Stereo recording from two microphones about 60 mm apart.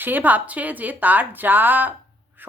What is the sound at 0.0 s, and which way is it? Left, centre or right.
A woman's voice, right.